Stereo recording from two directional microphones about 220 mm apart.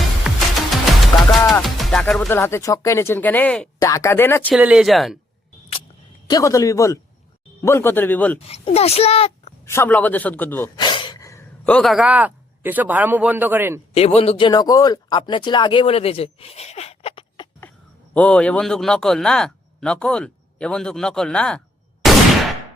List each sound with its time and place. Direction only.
0.3 s music: centre (ahead or behind)
1.0 s a man's voice: centre (ahead or behind)
4.5 s a man's voice: 5° right (ahead or behind)
6.2 s a man's voice: 15° left (ahead or behind)
8.4 s speech: 25° left (ahead or behind)
9.6 s a man's voice: 10° left (ahead or behind)
10.8 s speech: 20° left (ahead or behind); by 13.8 s 10° right (ahead or behind)
13.9 s speech: 25° left (ahead or behind)
18.1 s a man's voice: 5° left (ahead or behind)